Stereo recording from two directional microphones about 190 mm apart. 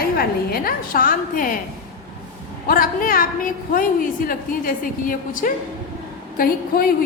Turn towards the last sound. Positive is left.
turn(degrees=50)  # may be behind; listen again after turning